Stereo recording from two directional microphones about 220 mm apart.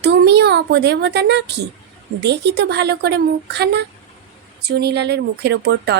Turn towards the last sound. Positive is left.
turn(degrees=-50)  # may be behind; listen again after turning